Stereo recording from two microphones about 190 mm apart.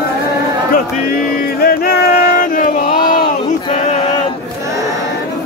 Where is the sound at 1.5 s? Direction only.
55° left (ahead or behind).